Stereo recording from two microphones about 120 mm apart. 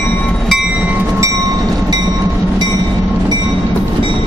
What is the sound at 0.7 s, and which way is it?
Train, 10° right (ahead or behind).